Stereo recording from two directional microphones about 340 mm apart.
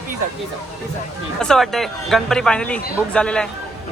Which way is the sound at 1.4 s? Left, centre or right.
Centre.